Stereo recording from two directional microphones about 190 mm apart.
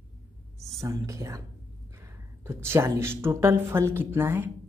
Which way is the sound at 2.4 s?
15° right (ahead or behind).